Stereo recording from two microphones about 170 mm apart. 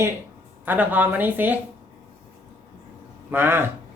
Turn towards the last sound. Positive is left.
turn(degrees=-15)  # may be behind; listen again after turning